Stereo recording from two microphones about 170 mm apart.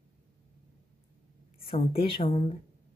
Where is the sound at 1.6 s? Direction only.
30° left (ahead or behind).